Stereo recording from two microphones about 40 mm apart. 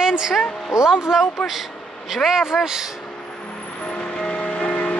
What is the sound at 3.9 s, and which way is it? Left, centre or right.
Vehicle, left.